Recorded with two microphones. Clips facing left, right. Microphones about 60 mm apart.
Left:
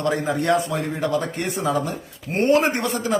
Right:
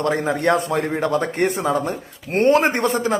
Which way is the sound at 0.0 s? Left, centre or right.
Right.